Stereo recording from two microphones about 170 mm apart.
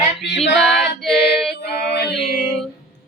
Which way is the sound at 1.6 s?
65° left (ahead or behind).